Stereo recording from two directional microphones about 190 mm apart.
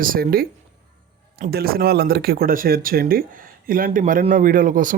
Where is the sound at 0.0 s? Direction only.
50° right (ahead or behind).